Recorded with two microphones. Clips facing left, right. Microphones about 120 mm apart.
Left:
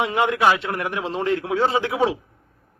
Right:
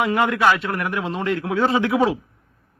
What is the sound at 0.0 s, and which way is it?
A man's voice, 25° left (ahead or behind).